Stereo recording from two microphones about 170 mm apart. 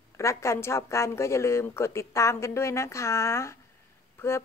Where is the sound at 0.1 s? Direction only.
15° left (ahead or behind).